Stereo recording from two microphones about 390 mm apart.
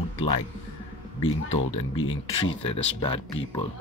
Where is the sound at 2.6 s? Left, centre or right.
Centre.